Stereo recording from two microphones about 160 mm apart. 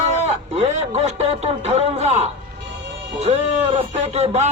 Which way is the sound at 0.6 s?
45° right (ahead or behind).